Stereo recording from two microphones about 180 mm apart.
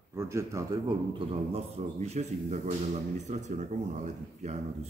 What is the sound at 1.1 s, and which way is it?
Speech, 35° right (ahead or behind).